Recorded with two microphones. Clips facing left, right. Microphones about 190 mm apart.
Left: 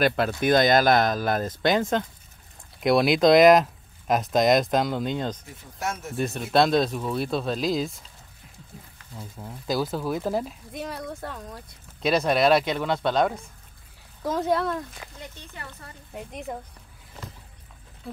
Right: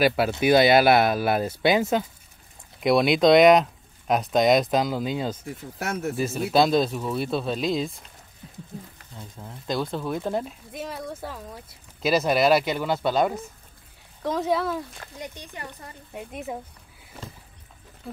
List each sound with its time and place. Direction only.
0.0 s speech: 5° right (ahead or behind)
5.8 s speech: 65° right (ahead or behind)
6.1 s speech: centre (ahead or behind)
9.1 s speech: centre (ahead or behind)
15.1 s speech: 15° right (ahead or behind)
16.1 s speech: centre (ahead or behind)
18.0 s speech: centre (ahead or behind)